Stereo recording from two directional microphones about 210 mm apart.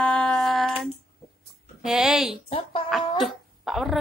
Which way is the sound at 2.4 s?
25° left (ahead or behind).